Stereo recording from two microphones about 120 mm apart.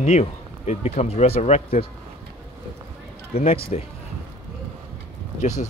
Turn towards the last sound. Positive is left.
turn(degrees=90)